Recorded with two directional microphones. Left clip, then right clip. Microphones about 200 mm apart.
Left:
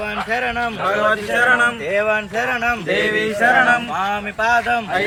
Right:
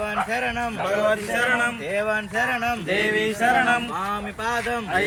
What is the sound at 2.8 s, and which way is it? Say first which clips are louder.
Male singing: left 4 dB; 15° right (ahead or behind).